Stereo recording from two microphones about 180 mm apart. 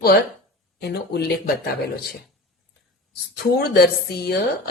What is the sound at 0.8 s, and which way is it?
Speech, 65° left (ahead or behind).